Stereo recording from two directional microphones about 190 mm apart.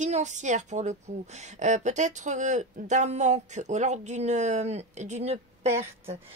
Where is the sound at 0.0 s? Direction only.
40° right (ahead or behind).